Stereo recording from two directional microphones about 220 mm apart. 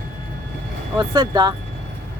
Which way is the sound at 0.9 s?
20° right (ahead or behind).